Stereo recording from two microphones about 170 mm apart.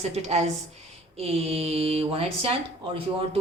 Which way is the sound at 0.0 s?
40° right (ahead or behind).